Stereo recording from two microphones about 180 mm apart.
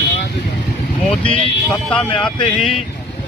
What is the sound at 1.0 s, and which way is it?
Speech, 5° left (ahead or behind).